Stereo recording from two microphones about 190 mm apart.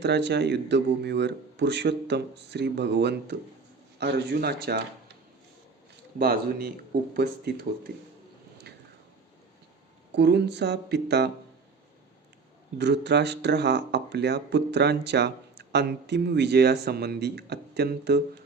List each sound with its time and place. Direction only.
0.0 s speech: 60° right (ahead or behind)
6.1 s speech: 50° right (ahead or behind)
10.2 s speech: 60° right (ahead or behind)
12.8 s speech: 65° right (ahead or behind)